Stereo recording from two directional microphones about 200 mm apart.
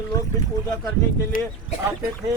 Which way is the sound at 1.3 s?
45° left (ahead or behind).